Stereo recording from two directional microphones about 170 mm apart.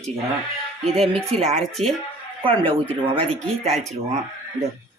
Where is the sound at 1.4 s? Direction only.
40° right (ahead or behind).